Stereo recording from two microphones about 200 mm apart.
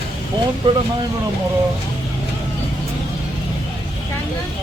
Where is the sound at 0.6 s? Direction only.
25° right (ahead or behind).